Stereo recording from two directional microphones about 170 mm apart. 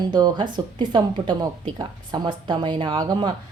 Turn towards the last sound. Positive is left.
turn(degrees=-25)  # may be behind; listen again after turning